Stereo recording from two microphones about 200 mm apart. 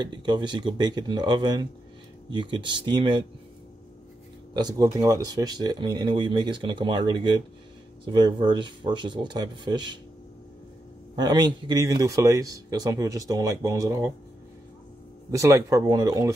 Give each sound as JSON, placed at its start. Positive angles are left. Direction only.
{"t": 0.0, "sound": "speech", "side_deg": -20}
{"t": 4.6, "sound": "speech", "side_deg": -20}
{"t": 11.1, "sound": "speech", "side_deg": -20}
{"t": 15.3, "sound": "speech", "side_deg": -15}